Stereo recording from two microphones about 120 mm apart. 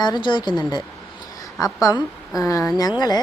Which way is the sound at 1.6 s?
30° left (ahead or behind).